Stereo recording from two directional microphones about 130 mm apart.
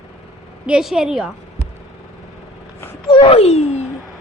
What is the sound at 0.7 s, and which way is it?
Speech, 5° right (ahead or behind).